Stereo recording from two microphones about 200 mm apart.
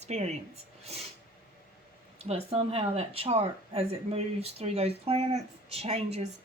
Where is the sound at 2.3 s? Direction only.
30° right (ahead or behind).